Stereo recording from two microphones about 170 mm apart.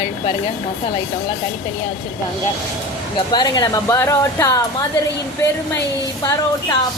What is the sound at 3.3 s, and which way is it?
Speech, 25° left (ahead or behind).